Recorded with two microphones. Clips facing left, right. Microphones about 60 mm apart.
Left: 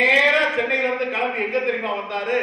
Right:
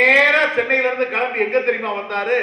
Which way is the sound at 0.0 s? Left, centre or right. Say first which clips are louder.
Right 3 dB; right.